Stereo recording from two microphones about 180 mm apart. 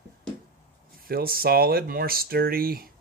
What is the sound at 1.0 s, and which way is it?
Speech, 55° right (ahead or behind).